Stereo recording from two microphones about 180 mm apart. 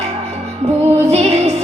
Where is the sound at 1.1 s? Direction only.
35° right (ahead or behind).